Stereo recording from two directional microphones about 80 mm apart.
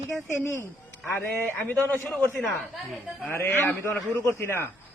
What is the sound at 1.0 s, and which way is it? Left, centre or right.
A man's voice, left.